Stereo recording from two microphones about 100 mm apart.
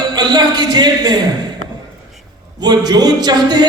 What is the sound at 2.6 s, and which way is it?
A man's voice, 45° right (ahead or behind).